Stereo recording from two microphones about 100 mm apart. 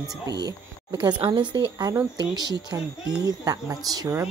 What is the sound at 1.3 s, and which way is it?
Speech, 55° right (ahead or behind).